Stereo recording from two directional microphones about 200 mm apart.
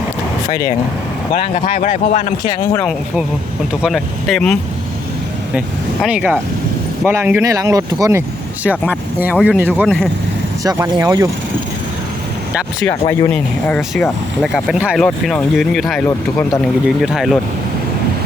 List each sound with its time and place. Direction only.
0.4 s speech: 15° left (ahead or behind)
1.3 s speech: 45° left (ahead or behind)
2.4 s speech: 15° left (ahead or behind)
3.8 s speech: centre (ahead or behind)
5.5 s speech: 5° right (ahead or behind)
10.6 s speech: 20° right (ahead or behind)
12.9 s speech: 15° left (ahead or behind)
13.3 s speech: 5° left (ahead or behind)